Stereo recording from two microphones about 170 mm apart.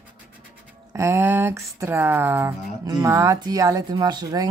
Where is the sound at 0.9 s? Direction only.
15° right (ahead or behind).